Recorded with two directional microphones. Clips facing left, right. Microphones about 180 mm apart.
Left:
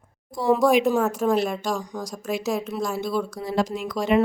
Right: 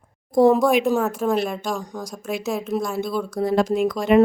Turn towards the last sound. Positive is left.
turn(degrees=-50)  # may be behind; listen again after turning